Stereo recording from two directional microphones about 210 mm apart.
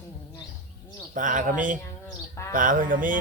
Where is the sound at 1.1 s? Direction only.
40° right (ahead or behind).